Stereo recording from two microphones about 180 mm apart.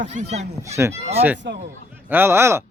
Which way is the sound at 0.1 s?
40° right (ahead or behind).